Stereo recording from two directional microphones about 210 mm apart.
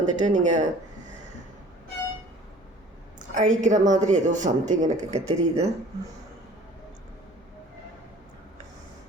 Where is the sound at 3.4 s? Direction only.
35° right (ahead or behind).